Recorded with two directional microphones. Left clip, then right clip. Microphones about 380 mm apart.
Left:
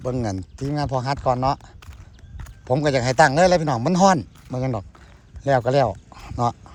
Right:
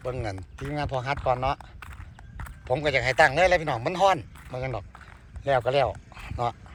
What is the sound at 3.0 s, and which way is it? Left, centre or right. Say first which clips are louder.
Speech: left 4 dB; centre.